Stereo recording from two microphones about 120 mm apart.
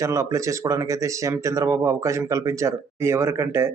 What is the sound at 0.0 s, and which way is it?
Speech, 25° right (ahead or behind).